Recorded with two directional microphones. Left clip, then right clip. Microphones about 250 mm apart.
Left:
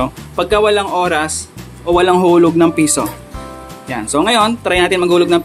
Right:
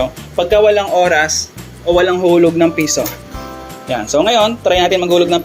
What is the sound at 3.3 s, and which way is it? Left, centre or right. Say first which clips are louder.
Speech: right 2 dB; centre.